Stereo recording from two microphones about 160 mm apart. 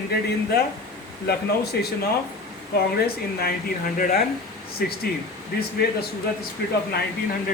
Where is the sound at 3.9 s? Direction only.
60° left (ahead or behind).